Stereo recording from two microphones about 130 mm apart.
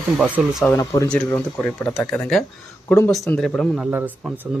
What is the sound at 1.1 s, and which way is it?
Speech, 5° left (ahead or behind).